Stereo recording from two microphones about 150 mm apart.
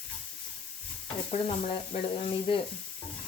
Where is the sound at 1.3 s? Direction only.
45° left (ahead or behind).